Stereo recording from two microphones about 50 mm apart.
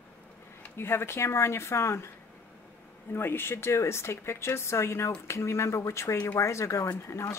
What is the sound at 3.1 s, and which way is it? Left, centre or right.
Speech, left.